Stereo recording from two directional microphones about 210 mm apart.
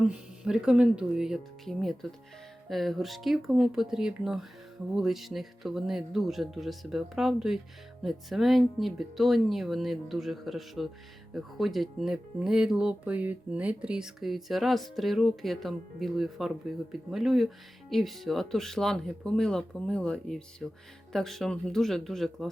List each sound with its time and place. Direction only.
0.0 s speech: 5° right (ahead or behind)